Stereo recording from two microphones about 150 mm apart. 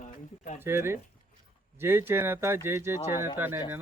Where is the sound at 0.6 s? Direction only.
15° right (ahead or behind).